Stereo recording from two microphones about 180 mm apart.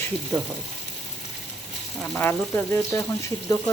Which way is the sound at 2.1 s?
10° left (ahead or behind).